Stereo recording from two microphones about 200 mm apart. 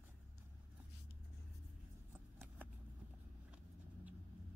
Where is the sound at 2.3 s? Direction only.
10° right (ahead or behind).